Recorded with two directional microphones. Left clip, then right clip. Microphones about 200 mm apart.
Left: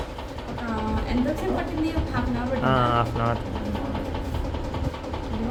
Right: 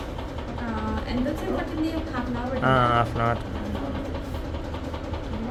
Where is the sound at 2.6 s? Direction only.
Centre (ahead or behind).